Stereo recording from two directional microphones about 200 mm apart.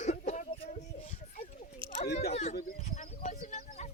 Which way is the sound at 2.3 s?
35° left (ahead or behind).